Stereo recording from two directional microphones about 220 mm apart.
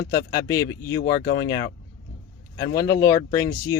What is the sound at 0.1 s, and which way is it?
Speech, 15° left (ahead or behind).